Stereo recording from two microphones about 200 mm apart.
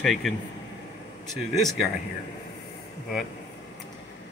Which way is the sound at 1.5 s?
Centre (ahead or behind).